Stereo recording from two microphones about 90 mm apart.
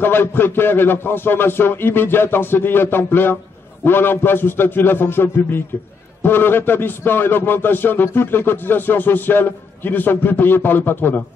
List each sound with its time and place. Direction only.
0.0 s a man's voice: 25° left (ahead or behind)